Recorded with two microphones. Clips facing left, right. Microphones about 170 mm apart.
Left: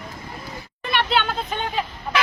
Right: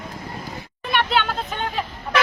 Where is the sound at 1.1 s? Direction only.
5° right (ahead or behind).